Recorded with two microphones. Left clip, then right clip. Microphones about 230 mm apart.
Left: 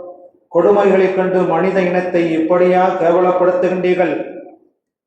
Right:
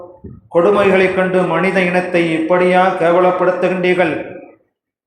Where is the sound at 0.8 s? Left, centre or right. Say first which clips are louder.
Even; right.